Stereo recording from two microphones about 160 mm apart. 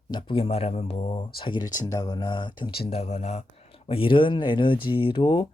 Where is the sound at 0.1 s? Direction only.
30° left (ahead or behind).